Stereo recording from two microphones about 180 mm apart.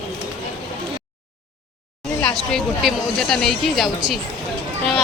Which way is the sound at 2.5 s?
Centre (ahead or behind).